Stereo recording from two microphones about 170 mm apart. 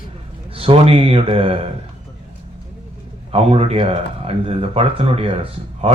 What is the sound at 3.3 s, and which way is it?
Speech, 35° right (ahead or behind).